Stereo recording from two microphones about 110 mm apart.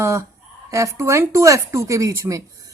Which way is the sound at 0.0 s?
30° right (ahead or behind).